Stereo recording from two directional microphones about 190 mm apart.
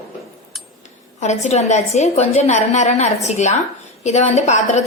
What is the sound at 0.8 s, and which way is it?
A woman's voice, 35° left (ahead or behind).